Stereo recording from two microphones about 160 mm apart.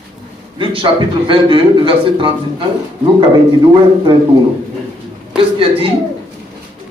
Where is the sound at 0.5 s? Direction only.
30° right (ahead or behind).